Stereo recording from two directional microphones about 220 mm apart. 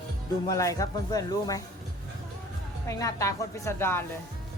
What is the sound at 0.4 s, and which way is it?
Speech, 15° left (ahead or behind).